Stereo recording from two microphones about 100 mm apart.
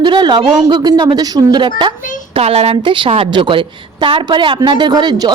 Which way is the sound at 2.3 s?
85° right.